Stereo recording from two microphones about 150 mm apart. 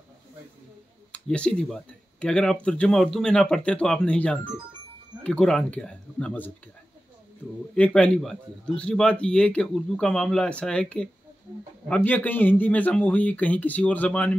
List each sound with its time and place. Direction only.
1.1 s a man's voice: 5° left (ahead or behind)
7.7 s a man's voice: 5° left (ahead or behind)